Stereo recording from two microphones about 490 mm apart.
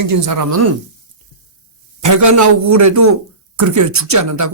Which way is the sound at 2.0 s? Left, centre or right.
Right.